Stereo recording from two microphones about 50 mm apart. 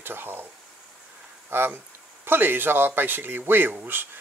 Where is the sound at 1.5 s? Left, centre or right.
Right.